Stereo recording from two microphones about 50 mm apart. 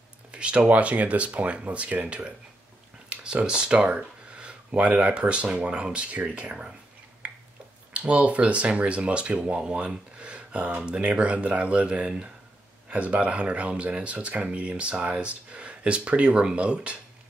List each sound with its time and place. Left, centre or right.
0.3 s speech: right
7.2 s finger snapping: centre
7.9 s speech: right